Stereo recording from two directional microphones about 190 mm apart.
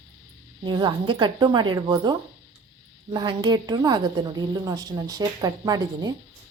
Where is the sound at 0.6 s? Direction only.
25° right (ahead or behind).